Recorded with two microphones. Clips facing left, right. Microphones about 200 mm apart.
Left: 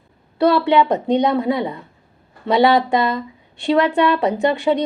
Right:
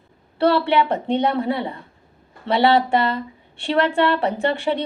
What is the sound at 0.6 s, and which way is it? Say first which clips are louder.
A woman's voice: left 4 dB; 15° left (ahead or behind).